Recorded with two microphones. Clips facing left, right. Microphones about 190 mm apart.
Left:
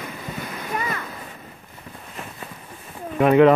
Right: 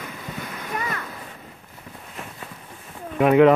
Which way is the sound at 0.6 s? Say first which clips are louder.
Left 2 dB; 10° left (ahead or behind).